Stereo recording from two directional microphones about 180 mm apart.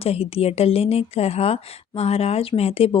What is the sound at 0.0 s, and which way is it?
Speech, 30° left (ahead or behind).